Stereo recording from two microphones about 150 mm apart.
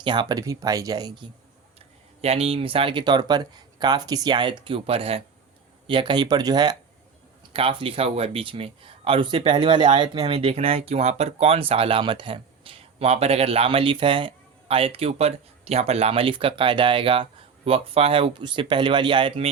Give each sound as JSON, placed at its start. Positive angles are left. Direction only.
{"t": 0.0, "sound": "speech", "side_deg": -30}
{"t": 2.2, "sound": "speech", "side_deg": -40}